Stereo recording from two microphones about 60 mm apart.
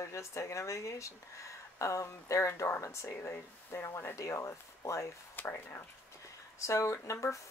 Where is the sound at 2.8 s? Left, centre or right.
Left.